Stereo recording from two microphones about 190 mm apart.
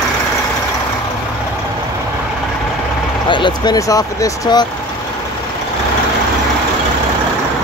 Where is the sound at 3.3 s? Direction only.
25° left (ahead or behind).